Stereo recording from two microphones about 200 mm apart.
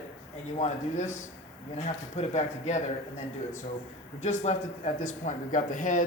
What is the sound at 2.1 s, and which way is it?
Speech, 35° left (ahead or behind).